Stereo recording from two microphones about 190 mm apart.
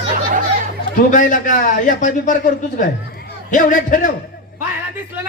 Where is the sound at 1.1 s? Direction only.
45° left (ahead or behind).